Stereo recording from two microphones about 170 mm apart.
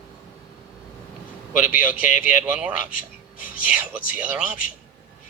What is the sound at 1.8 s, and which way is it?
Speech, 10° right (ahead or behind).